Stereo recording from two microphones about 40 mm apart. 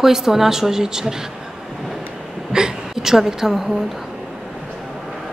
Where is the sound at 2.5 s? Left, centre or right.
Centre.